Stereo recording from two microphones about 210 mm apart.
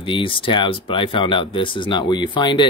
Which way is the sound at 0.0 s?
25° left (ahead or behind).